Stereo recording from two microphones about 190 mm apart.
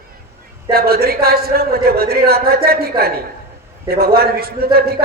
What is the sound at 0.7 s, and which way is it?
A man's voice, 55° right (ahead or behind).